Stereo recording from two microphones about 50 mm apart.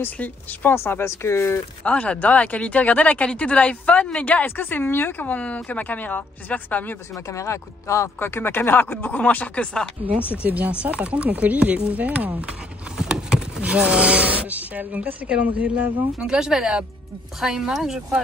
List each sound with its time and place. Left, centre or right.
0.0 s a woman's voice: left
0.7 s speech: left
1.8 s a woman's voice: left
5.2 s a woman's voice: left
7.2 s speech: left
8.2 s speech: left
10.4 s speech: right
12.9 s a sound: centre
13.6 s speech: right
16.2 s speech: centre